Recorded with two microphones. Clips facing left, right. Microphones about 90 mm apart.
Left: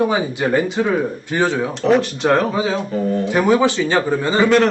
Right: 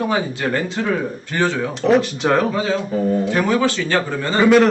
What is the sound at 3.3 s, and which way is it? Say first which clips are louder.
Speech: left 3 dB; 15° left (ahead or behind).